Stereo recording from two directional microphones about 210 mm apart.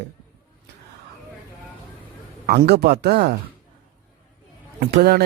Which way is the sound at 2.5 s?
50° right (ahead or behind).